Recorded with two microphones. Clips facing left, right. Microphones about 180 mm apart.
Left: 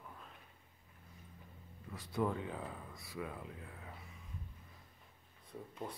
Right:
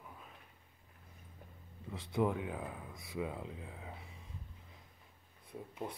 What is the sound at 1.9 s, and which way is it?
Speech, 20° right (ahead or behind).